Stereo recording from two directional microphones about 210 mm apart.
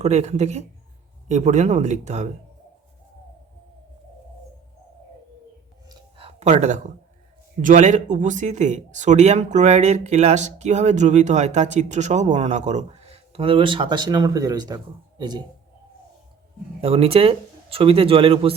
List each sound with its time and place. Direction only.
0.0 s speech: 30° right (ahead or behind)
5.9 s a sound: 25° right (ahead or behind)
7.6 s speech: 35° right (ahead or behind); by 15.4 s 20° right (ahead or behind)
16.8 s speech: 25° right (ahead or behind)